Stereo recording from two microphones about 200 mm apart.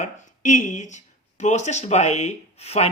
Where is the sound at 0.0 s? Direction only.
35° left (ahead or behind).